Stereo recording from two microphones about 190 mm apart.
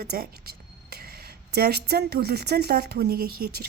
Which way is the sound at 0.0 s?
55° right (ahead or behind).